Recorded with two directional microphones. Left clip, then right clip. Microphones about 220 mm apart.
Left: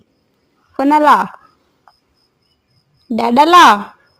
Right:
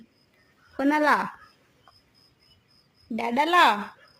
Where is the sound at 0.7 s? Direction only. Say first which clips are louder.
Left 12 dB; 25° left (ahead or behind).